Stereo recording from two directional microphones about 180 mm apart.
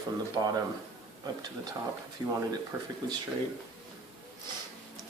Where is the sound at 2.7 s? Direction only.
10° right (ahead or behind).